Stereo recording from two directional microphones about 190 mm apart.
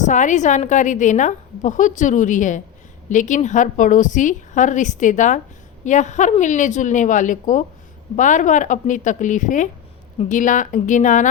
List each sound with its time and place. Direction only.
0.0 s a woman's voice: 40° left (ahead or behind)